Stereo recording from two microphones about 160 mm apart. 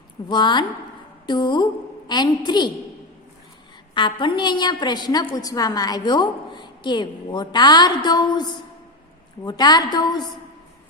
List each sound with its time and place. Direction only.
0.3 s a woman's voice: 30° left (ahead or behind)
3.9 s a woman's voice: 30° left (ahead or behind)